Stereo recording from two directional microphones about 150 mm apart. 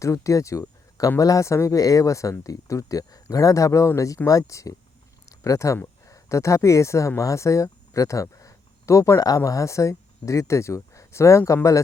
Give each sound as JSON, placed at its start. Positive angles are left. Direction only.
{"t": 0.0, "sound": "speech", "side_deg": 20}